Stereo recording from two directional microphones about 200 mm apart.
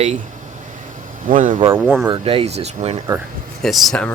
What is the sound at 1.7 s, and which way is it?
Speech, 10° right (ahead or behind).